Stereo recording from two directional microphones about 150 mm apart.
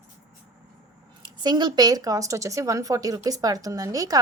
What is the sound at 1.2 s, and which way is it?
Speech, 30° right (ahead or behind).